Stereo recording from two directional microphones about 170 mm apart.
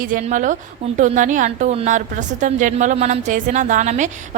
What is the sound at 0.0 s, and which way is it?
A woman's voice, 50° right (ahead or behind).